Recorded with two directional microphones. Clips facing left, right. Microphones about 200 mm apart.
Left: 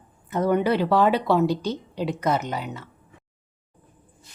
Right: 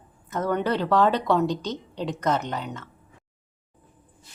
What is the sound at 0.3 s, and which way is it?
Speech, 10° left (ahead or behind).